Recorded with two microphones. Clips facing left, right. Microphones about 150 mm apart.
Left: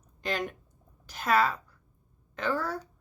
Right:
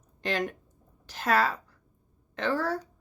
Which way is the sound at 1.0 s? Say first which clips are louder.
Even; 35° right (ahead or behind).